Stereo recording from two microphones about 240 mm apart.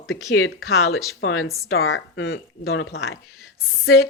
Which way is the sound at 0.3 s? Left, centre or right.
Left.